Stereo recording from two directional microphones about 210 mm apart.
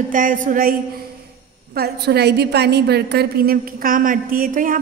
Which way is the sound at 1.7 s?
50° right (ahead or behind).